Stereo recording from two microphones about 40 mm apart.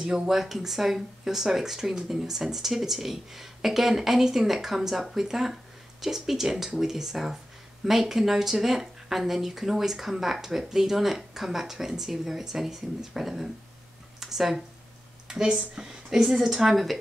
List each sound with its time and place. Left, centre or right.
0.0 s speech: centre
15.2 s a sound: centre
15.7 s speech: centre